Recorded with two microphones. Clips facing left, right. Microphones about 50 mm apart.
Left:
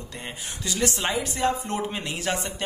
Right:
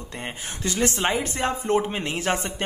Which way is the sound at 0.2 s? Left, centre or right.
Right.